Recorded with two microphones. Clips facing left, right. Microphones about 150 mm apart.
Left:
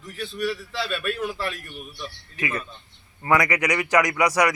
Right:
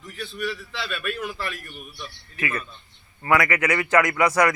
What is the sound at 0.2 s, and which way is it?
A man's voice, 35° left (ahead or behind).